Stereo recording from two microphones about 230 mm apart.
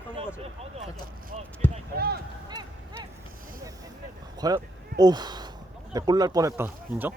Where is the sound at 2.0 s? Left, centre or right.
Right.